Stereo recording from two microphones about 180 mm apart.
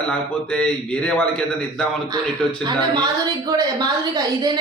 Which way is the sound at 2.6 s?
25° right (ahead or behind).